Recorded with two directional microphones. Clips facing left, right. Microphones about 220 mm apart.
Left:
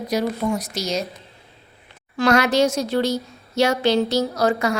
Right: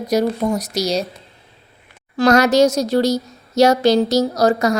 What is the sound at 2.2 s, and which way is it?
A woman's voice, 40° right (ahead or behind).